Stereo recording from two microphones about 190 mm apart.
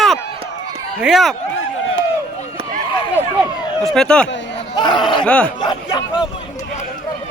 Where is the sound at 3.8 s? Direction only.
5° left (ahead or behind).